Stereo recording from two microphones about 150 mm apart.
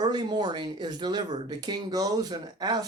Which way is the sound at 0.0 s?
30° right (ahead or behind).